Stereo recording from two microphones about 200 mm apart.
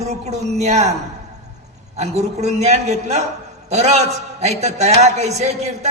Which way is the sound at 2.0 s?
35° right (ahead or behind).